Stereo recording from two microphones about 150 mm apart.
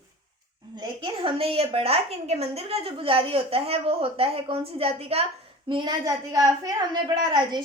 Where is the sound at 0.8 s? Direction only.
35° right (ahead or behind).